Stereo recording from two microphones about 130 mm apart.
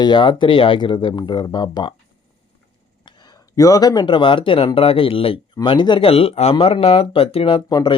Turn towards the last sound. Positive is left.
turn(degrees=30)  # may be behind; listen again after turning